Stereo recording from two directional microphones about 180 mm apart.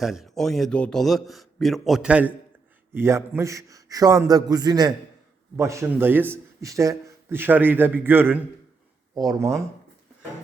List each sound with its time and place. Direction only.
0.0 s a man's voice: centre (ahead or behind)
9.1 s a man's voice: 20° right (ahead or behind)